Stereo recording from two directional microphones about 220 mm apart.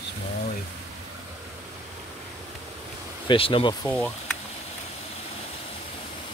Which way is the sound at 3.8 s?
5° left (ahead or behind).